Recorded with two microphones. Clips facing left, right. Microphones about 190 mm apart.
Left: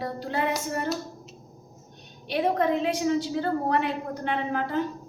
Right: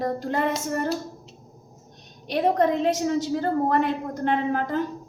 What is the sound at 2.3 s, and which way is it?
A woman's voice, 40° right (ahead or behind).